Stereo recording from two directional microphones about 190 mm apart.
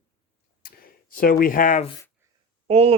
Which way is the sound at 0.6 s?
50° left (ahead or behind).